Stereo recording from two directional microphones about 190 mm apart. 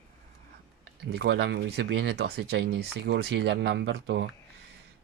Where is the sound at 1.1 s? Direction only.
65° right (ahead or behind).